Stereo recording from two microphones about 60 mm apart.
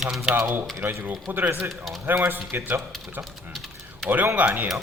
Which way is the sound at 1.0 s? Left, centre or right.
Right.